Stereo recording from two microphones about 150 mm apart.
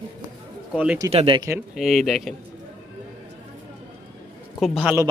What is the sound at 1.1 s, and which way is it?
Speech, 40° right (ahead or behind).